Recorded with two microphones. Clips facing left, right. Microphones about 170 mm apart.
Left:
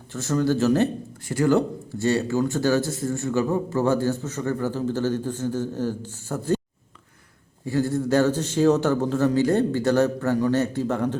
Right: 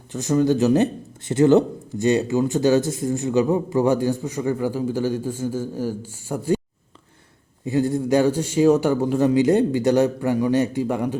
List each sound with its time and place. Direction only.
0.1 s speech: 15° right (ahead or behind)
7.6 s speech: 20° right (ahead or behind)